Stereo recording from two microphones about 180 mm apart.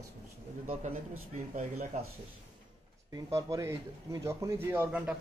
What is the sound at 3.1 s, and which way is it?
Speech, 20° right (ahead or behind).